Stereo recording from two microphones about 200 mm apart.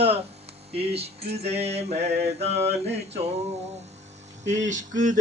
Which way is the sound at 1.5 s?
30° right (ahead or behind).